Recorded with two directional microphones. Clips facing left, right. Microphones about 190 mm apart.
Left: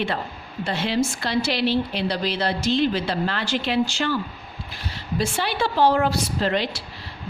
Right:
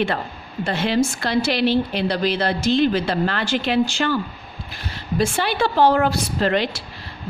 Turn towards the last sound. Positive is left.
turn(degrees=-60)  # may be behind; listen again after turning